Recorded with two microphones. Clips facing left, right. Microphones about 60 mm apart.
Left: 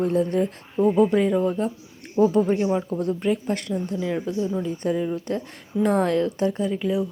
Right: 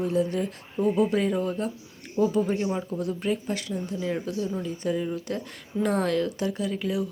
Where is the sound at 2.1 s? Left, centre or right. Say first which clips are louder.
Left 5 dB; left.